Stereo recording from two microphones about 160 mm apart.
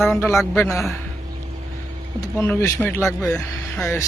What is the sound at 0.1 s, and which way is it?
Speech, 15° left (ahead or behind).